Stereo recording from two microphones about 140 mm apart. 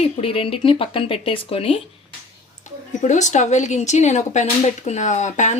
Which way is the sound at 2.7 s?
60° left (ahead or behind).